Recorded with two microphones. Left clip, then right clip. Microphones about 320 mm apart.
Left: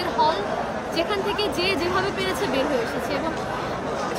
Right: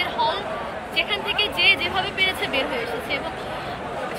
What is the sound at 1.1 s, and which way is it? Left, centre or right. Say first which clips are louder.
Speech: right 1 dB; centre.